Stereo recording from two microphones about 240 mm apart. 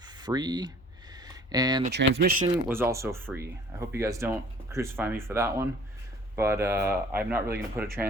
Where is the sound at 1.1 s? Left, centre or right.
Centre.